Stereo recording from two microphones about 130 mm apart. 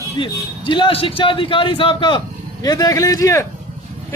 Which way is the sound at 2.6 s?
30° left (ahead or behind).